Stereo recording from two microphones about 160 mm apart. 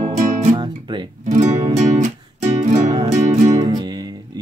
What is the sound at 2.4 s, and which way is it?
Music, 50° right (ahead or behind).